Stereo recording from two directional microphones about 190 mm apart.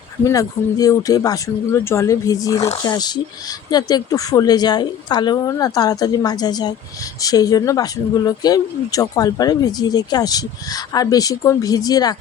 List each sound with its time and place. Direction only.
0.3 s speech: 15° left (ahead or behind)